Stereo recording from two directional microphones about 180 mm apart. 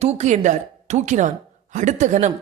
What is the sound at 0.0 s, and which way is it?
A woman's voice, 35° right (ahead or behind).